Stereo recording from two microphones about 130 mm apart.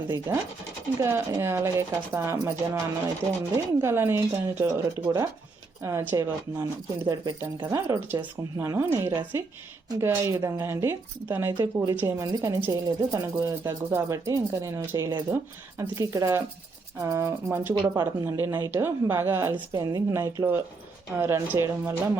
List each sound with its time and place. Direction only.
0.3 s speech: 20° right (ahead or behind)
3.5 s speech: 20° right (ahead or behind)
5.0 s speech: 30° right (ahead or behind)
8.0 s speech: 15° right (ahead or behind)